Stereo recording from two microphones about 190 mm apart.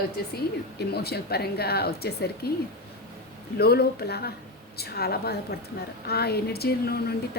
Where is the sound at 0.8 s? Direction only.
55° left (ahead or behind).